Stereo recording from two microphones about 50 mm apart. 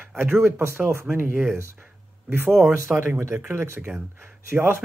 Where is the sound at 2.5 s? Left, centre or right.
Centre.